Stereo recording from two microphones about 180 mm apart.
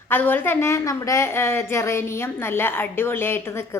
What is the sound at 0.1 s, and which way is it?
A woman's voice, 10° left (ahead or behind).